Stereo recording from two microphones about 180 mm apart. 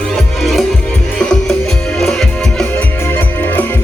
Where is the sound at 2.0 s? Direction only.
Centre (ahead or behind).